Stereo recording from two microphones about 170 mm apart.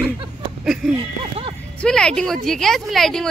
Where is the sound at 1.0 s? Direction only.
30° right (ahead or behind).